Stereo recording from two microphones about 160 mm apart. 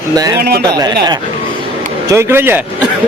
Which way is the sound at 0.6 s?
25° right (ahead or behind).